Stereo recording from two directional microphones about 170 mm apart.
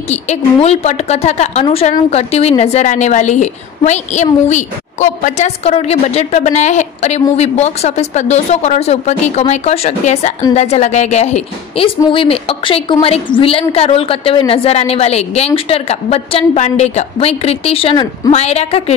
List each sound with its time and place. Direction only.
0.1 s a woman's voice: 40° left (ahead or behind)